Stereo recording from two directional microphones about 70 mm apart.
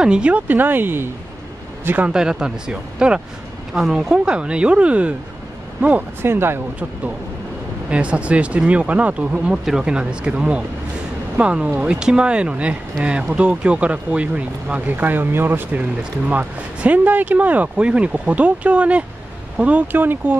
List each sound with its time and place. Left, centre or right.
0.0 s speech: centre; by 1.1 s right
2.0 s speech: centre
6.2 s speech: right
7.9 s speech: centre